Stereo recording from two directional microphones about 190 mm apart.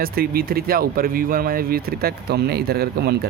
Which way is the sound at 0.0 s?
50° right (ahead or behind).